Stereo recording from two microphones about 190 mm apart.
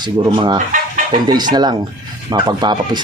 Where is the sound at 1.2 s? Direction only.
20° right (ahead or behind).